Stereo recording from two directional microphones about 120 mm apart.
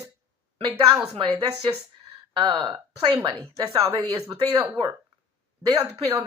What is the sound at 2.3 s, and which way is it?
Speech, 35° right (ahead or behind).